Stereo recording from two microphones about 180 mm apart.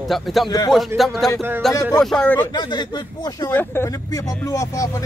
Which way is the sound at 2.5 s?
25° left (ahead or behind).